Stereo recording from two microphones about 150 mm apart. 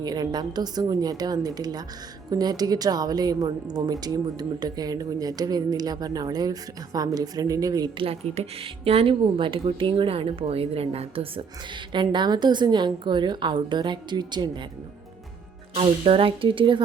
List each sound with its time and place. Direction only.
0.0 s a woman's voice: 30° right (ahead or behind)
8.0 s a woman's voice: 45° right (ahead or behind)
15.7 s speech: 40° right (ahead or behind)